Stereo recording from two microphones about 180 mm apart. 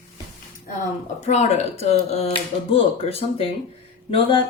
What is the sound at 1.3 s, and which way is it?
Speech, 40° left (ahead or behind).